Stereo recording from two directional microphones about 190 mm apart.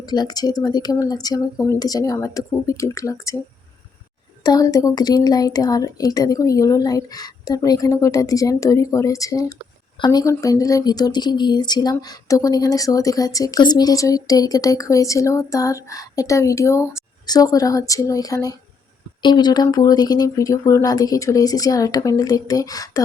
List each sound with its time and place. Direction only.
0.0 s a woman's voice: 20° left (ahead or behind)
4.4 s a woman's voice: 20° left (ahead or behind)